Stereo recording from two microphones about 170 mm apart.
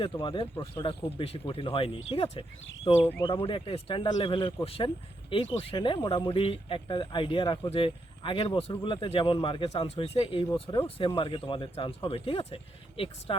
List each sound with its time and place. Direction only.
0.0 s speech: 30° left (ahead or behind)
3.0 s speech: 10° left (ahead or behind)
3.2 s speech: 30° left (ahead or behind)